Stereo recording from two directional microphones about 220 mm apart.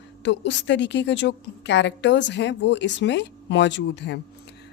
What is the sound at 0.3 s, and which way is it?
Speech, 55° left (ahead or behind).